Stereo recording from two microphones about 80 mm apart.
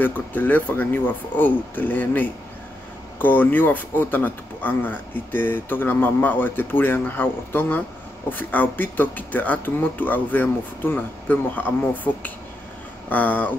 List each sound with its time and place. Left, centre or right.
0.0 s speech: left